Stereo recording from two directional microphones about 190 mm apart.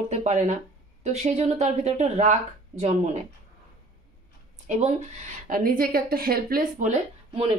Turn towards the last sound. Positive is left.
turn(degrees=-40)  # may be behind; listen again after turning